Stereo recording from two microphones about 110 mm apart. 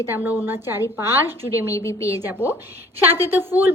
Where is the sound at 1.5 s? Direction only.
30° left (ahead or behind).